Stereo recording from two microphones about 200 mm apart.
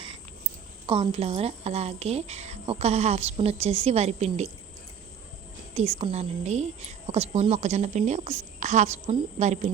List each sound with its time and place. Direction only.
0.9 s a woman's voice: 25° right (ahead or behind)
5.7 s a woman's voice: 30° right (ahead or behind)